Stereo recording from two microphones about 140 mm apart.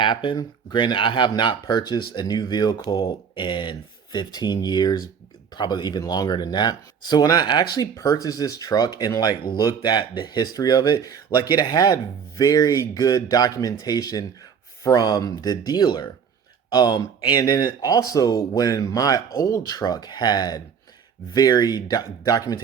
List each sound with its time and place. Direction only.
0.0 s speech: 35° left (ahead or behind)